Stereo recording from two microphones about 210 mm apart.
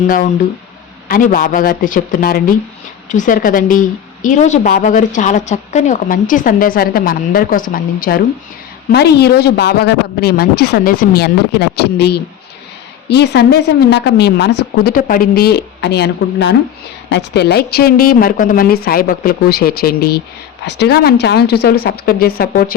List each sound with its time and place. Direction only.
1.0 s a woman's voice: 40° left (ahead or behind)
8.9 s a woman's voice: 50° left (ahead or behind)